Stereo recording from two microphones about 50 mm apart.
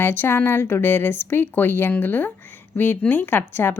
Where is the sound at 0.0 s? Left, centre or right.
Left.